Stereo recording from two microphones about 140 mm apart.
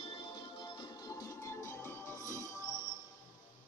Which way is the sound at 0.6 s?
30° left (ahead or behind).